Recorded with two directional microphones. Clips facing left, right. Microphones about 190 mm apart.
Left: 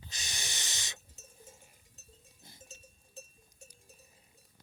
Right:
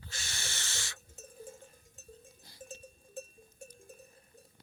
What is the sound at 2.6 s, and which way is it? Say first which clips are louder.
Cowbell: right 8 dB; 55° right (ahead or behind).